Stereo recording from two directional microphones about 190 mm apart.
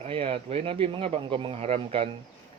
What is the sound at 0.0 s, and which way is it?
A man's voice, 30° right (ahead or behind).